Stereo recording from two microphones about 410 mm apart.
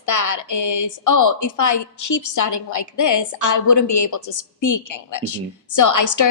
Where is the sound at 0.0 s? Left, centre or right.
Left.